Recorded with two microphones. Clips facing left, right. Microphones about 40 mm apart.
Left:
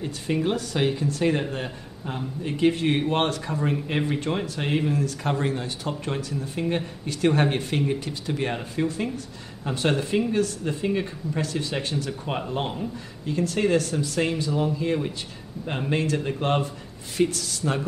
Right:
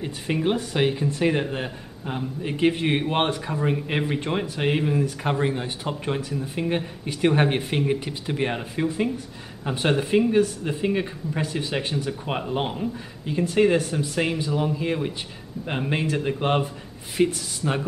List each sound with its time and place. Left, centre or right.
0.0 s speech: centre